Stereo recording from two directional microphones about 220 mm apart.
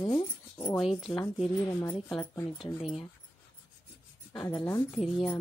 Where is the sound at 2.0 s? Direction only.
5° left (ahead or behind).